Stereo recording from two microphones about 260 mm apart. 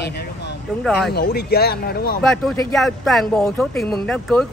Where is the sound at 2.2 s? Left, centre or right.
Centre.